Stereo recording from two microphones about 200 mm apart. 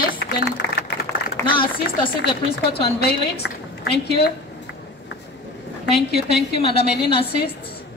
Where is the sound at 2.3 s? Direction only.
30° left (ahead or behind).